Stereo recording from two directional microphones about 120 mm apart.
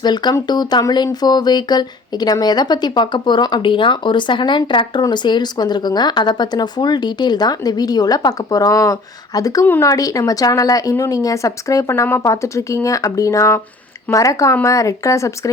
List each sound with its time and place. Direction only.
0.0 s speech: 35° left (ahead or behind)
9.6 s speech: 15° left (ahead or behind)
9.9 s a woman's voice: 30° left (ahead or behind)